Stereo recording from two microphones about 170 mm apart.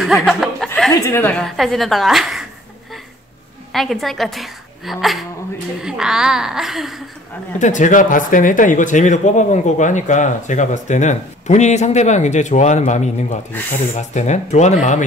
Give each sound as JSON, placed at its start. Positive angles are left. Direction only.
{"t": 0.0, "sound": "speech", "side_deg": 0}
{"t": 1.0, "sound": "a woman's voice", "side_deg": 15}
{"t": 3.7, "sound": "a woman's voice", "side_deg": 0}
{"t": 7.5, "sound": "speech", "side_deg": 45}
{"t": 13.5, "sound": "speech", "side_deg": 10}
{"t": 13.9, "sound": "speech", "side_deg": 45}